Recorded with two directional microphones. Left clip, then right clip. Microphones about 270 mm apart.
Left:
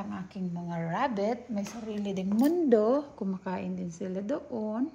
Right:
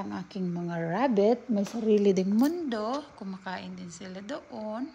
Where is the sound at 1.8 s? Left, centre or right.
Right.